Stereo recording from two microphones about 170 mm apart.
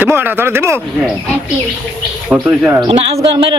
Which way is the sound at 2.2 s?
5° right (ahead or behind).